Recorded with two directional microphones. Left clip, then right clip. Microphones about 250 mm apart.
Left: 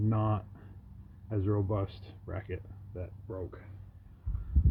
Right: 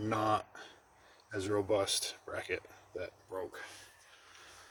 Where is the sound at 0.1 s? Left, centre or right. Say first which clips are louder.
Right 6 dB; centre.